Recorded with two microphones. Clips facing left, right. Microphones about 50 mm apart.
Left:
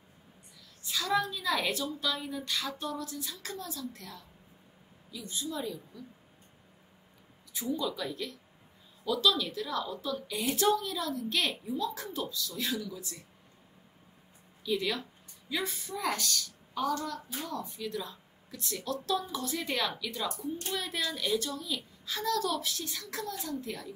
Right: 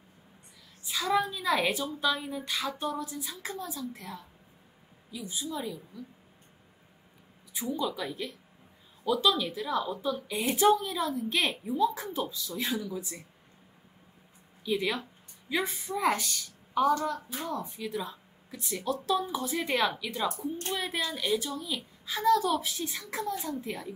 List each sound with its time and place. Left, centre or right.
0.8 s a woman's voice: centre
7.5 s a child's voice: centre
14.6 s a woman's voice: right
20.7 s a child's voice: centre